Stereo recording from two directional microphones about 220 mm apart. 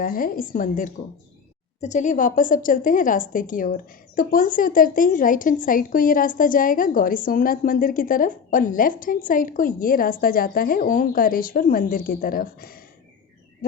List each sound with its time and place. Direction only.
0.0 s speech: 40° left (ahead or behind)